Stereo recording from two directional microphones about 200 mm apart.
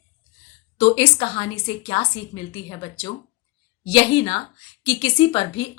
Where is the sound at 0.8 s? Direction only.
25° left (ahead or behind).